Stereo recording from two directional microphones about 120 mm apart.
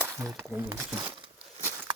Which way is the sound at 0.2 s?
25° right (ahead or behind).